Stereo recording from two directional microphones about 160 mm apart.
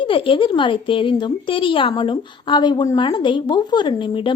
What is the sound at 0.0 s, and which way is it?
Speech, 30° left (ahead or behind).